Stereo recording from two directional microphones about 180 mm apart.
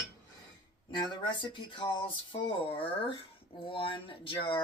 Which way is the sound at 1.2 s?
25° left (ahead or behind).